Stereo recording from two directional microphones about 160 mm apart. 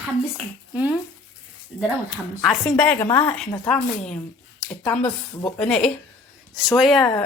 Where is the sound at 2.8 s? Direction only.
10° left (ahead or behind).